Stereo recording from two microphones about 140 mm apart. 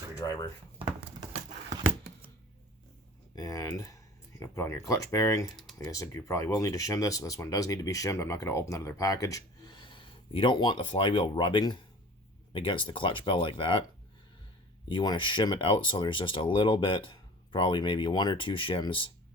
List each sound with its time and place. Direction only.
0.2 s speech: 25° left (ahead or behind)
3.3 s speech: 25° left (ahead or behind)
14.8 s speech: 35° left (ahead or behind)